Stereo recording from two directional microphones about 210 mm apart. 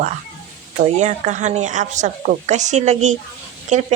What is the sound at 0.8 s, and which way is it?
A woman's voice, 35° right (ahead or behind).